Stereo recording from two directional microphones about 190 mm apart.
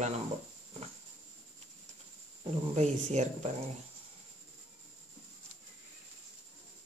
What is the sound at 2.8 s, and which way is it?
Speech, 35° right (ahead or behind).